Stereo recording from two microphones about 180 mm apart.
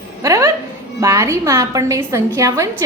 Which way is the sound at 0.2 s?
15° right (ahead or behind).